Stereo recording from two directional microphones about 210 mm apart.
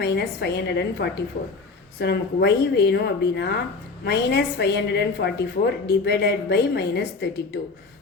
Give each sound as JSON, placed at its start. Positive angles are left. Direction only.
{"t": 0.0, "sound": "a woman's voice", "side_deg": 50}